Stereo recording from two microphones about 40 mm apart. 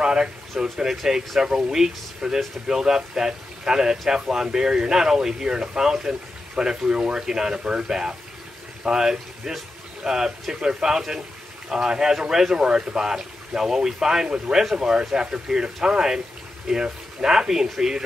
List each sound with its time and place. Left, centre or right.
0.0 s speech: centre
0.8 s speech: centre